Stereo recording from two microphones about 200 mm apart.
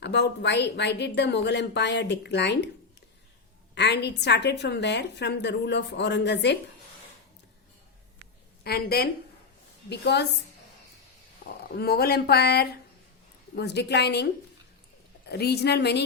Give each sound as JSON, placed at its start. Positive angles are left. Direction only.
{"t": 0.0, "sound": "a woman's voice", "side_deg": 60}
{"t": 3.8, "sound": "a woman's voice", "side_deg": 55}
{"t": 8.6, "sound": "a woman's voice", "side_deg": 50}
{"t": 11.7, "sound": "a woman's voice", "side_deg": 50}
{"t": 15.3, "sound": "a woman's voice", "side_deg": 55}